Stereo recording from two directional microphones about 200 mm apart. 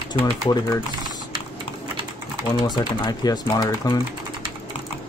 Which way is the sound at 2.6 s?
20° left (ahead or behind).